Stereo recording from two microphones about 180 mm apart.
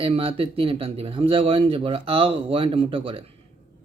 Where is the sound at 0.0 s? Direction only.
30° right (ahead or behind).